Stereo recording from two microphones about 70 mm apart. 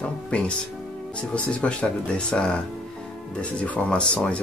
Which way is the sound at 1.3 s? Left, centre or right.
Centre.